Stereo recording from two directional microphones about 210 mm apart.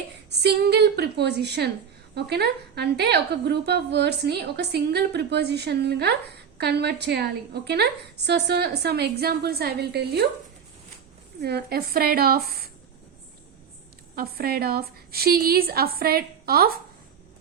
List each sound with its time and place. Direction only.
0.3 s a woman's voice: 55° right (ahead or behind)
11.3 s a woman's voice: 50° right (ahead or behind)
14.2 s a woman's voice: 45° right (ahead or behind)